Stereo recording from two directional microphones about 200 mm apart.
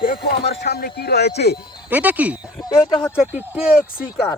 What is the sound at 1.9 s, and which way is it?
Speech, 10° right (ahead or behind).